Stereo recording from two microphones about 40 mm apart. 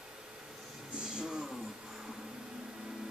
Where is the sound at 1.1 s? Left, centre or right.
Centre.